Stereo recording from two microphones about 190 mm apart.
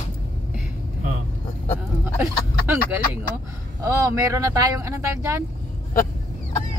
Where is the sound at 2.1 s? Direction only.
10° right (ahead or behind).